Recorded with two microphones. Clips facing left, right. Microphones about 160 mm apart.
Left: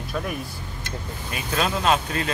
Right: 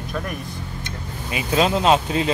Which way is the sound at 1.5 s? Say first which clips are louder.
Right 5 dB; 25° right (ahead or behind).